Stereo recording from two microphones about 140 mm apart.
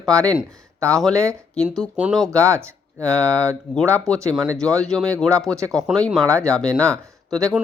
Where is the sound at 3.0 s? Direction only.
10° left (ahead or behind).